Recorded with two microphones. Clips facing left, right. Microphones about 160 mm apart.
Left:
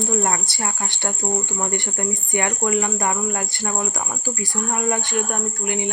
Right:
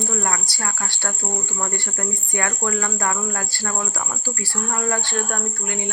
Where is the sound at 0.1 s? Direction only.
25° left (ahead or behind).